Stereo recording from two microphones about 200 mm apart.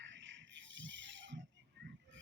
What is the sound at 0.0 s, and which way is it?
Music, 65° right (ahead or behind).